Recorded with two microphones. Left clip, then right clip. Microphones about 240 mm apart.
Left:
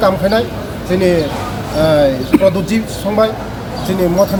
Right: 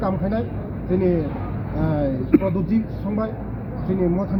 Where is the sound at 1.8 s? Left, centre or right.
Centre.